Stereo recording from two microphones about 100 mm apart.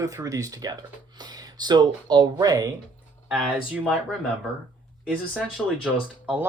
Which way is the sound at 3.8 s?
10° left (ahead or behind).